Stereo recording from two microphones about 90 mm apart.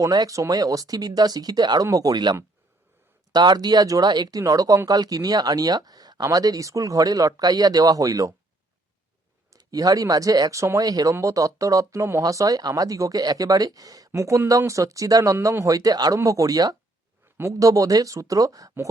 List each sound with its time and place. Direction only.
0.0 s speech: 40° right (ahead or behind)
9.6 s speech: 40° right (ahead or behind)